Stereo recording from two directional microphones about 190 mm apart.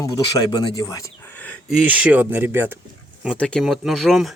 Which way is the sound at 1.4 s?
5° left (ahead or behind).